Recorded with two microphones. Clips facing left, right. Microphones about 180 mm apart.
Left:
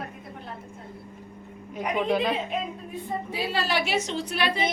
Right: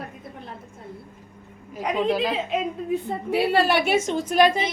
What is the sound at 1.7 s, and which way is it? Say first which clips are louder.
Speech: right 2 dB; centre (ahead or behind).